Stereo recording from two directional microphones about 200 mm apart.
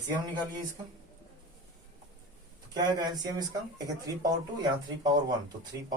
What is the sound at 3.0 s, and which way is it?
Speech, 20° right (ahead or behind).